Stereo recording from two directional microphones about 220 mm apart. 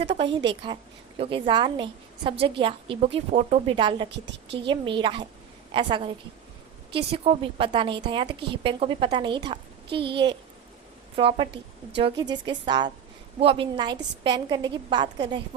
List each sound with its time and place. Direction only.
0.6 s a woman's voice: 20° right (ahead or behind)
4.1 s a woman's voice: 50° right (ahead or behind)
4.6 s a woman's voice: 20° right (ahead or behind)